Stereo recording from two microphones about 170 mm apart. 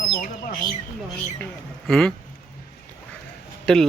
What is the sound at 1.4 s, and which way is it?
Speech, 5° left (ahead or behind).